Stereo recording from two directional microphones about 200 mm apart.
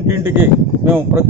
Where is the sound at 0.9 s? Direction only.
10° right (ahead or behind).